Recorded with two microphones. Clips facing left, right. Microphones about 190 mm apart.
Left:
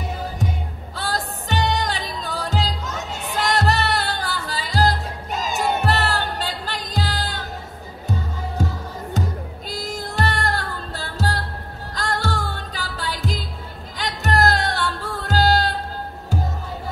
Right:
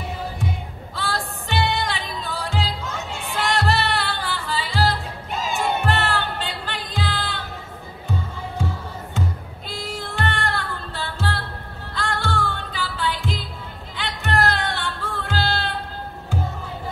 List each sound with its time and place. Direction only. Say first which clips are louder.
0.9 s music: left 1 dB; 40° left (ahead or behind)
8.6 s music: left 3 dB; 40° left (ahead or behind)